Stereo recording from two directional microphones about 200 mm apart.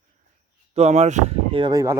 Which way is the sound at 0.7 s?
35° right (ahead or behind).